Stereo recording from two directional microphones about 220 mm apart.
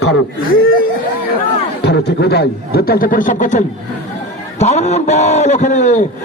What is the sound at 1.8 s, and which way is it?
A man's voice, 50° left (ahead or behind).